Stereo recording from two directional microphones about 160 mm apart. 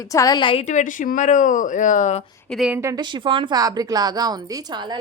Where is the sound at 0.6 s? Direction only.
50° left (ahead or behind).